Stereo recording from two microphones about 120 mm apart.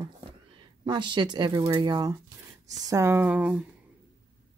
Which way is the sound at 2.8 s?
25° right (ahead or behind).